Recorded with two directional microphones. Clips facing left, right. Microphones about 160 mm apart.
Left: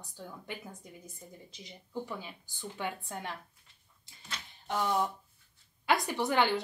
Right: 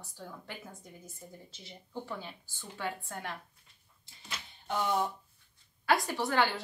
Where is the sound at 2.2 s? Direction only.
15° left (ahead or behind).